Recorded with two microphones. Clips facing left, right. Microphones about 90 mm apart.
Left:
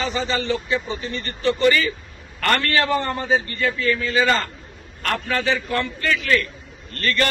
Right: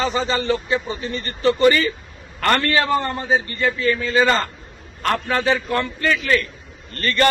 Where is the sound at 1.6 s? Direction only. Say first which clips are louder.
Right 2 dB; 40° right (ahead or behind).